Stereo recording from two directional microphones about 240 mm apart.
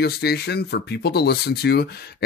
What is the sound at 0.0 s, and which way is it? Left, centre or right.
Speech, left.